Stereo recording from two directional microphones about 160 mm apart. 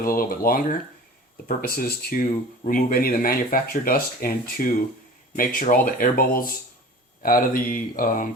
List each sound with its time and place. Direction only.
0.0 s speech: 65° left (ahead or behind)